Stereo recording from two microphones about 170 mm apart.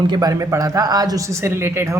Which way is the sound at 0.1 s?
20° right (ahead or behind).